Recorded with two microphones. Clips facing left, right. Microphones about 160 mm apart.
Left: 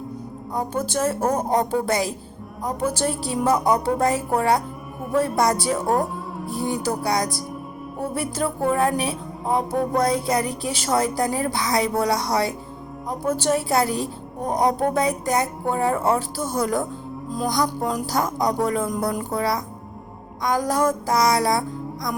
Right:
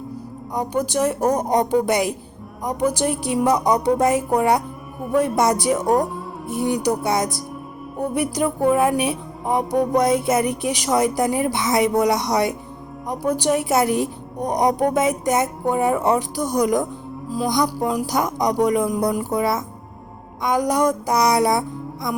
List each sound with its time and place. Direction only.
0.7 s a woman's voice: 15° right (ahead or behind)
3.5 s a woman's voice: centre (ahead or behind)
3.8 s a woman's voice: 20° right (ahead or behind)
17.6 s a woman's voice: centre (ahead or behind)
18.0 s a woman's voice: 20° right (ahead or behind)
18.9 s a woman's voice: centre (ahead or behind)
19.4 s speech: 20° right (ahead or behind)